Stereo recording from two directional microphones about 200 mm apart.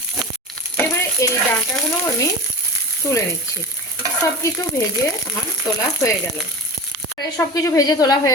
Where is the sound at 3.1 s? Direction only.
15° left (ahead or behind).